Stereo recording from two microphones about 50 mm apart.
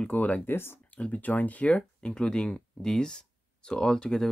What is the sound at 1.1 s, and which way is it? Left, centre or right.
Speech, left.